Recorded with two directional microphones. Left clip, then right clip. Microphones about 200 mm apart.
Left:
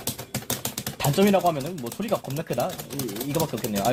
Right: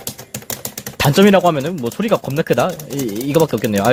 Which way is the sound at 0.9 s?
60° right (ahead or behind).